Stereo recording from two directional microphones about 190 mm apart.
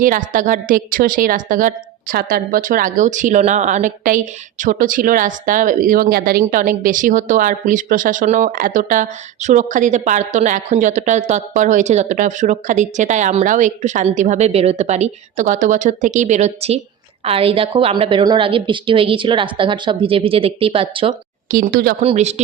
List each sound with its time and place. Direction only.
0.0 s a woman's voice: 45° right (ahead or behind); by 21.2 s 30° right (ahead or behind)
21.5 s speech: 50° right (ahead or behind)
22.0 s a woman's voice: 35° right (ahead or behind)